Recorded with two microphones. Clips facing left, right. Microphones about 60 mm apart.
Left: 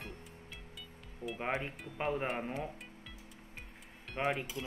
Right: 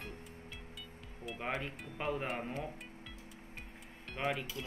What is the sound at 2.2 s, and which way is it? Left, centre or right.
Speech, centre.